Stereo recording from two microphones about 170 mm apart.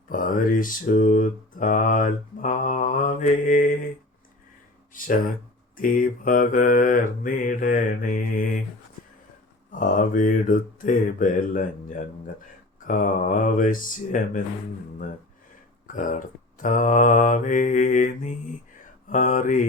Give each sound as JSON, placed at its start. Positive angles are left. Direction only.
{"t": 0.1, "sound": "mantra", "side_deg": 50}
{"t": 5.7, "sound": "mantra", "side_deg": 55}
{"t": 9.7, "sound": "mantra", "side_deg": 50}
{"t": 15.9, "sound": "mantra", "side_deg": 50}